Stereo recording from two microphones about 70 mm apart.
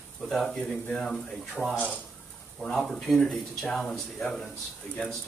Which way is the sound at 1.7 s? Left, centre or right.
Left.